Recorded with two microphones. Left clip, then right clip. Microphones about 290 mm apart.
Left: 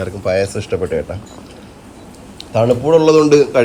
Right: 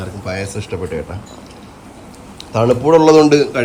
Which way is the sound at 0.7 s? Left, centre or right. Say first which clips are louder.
Left 4 dB; centre.